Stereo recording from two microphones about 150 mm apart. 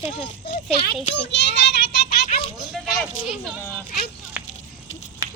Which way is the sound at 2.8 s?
Centre (ahead or behind).